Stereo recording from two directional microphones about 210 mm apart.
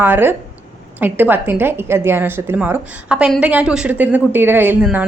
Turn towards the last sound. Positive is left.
turn(degrees=-5)  # may be behind; listen again after turning